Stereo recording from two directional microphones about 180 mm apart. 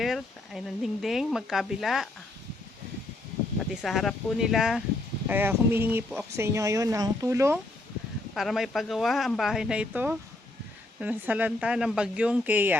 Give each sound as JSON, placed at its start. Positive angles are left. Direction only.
{"t": 0.0, "sound": "speech", "side_deg": 0}
{"t": 3.6, "sound": "speech", "side_deg": 0}
{"t": 8.4, "sound": "speech", "side_deg": 0}